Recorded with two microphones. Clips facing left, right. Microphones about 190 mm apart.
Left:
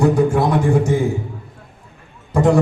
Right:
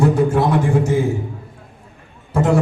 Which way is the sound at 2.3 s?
15° left (ahead or behind).